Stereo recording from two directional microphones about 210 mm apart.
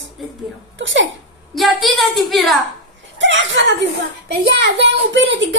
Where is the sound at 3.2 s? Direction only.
60° right (ahead or behind).